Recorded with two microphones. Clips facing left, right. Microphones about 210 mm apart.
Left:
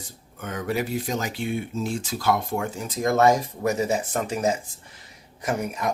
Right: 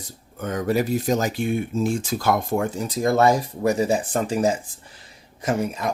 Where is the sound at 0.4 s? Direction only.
40° right (ahead or behind).